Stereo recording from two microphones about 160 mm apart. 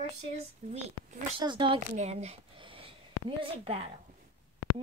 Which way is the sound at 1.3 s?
30° right (ahead or behind).